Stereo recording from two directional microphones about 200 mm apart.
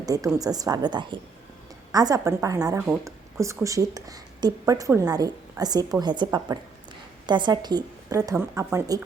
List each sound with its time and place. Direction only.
0.0 s a woman's voice: 15° right (ahead or behind)